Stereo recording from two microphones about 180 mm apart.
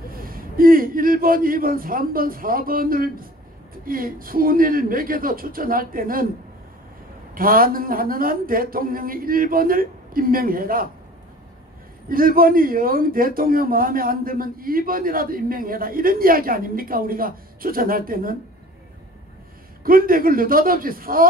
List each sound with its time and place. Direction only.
0.1 s a man's voice: 55° right (ahead or behind)
7.3 s a man's voice: 55° right (ahead or behind)
12.1 s a man's voice: 55° right (ahead or behind)
19.8 s a man's voice: 55° right (ahead or behind)